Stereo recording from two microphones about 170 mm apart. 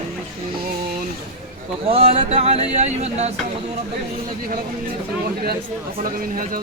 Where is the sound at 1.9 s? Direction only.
35° right (ahead or behind).